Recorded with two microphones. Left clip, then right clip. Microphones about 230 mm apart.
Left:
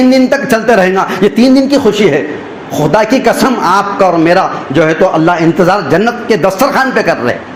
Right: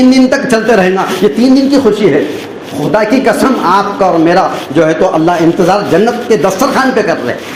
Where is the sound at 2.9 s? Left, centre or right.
Left.